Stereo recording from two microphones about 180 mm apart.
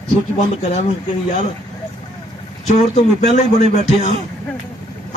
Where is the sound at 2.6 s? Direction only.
40° left (ahead or behind).